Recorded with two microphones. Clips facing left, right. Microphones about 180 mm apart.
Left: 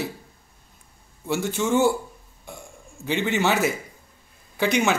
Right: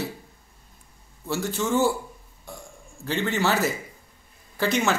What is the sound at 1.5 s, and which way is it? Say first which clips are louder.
Speech: left 2 dB; 20° left (ahead or behind).